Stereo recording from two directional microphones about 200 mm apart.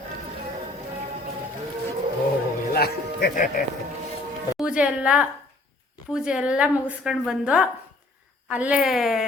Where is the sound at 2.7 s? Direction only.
50° left (ahead or behind).